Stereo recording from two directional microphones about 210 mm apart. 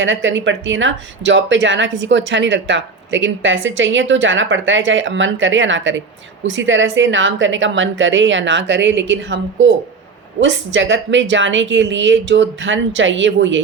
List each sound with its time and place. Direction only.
0.0 s speech: 65° right (ahead or behind)